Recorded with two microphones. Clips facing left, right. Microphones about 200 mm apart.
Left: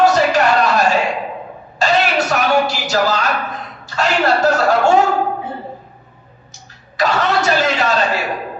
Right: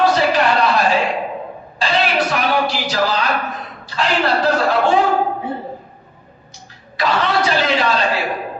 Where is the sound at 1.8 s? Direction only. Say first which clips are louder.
Left 2 dB; 45° left (ahead or behind).